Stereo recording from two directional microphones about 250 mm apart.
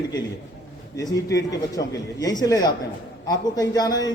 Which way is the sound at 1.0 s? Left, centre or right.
Centre.